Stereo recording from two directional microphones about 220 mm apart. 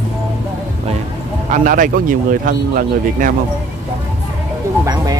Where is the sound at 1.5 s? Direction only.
35° right (ahead or behind).